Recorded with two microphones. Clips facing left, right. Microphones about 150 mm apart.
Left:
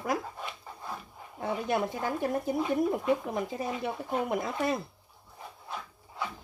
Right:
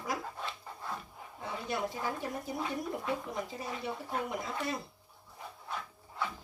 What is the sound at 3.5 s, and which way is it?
Speech, 55° left (ahead or behind).